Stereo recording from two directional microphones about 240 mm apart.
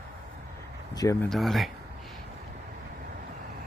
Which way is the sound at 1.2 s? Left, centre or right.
Centre.